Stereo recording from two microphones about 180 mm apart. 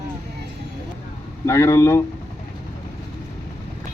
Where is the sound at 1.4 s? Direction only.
15° left (ahead or behind).